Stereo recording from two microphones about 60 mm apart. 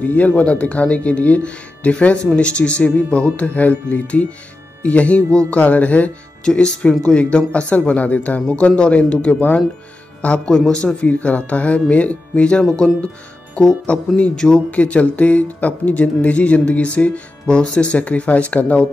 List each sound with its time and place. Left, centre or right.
0.0 s speech: left
6.4 s a man's voice: centre
11.1 s a man's voice: left